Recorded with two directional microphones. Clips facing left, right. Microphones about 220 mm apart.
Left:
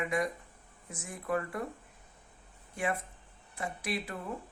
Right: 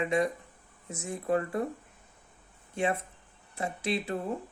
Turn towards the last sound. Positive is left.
turn(degrees=-25)  # may be behind; listen again after turning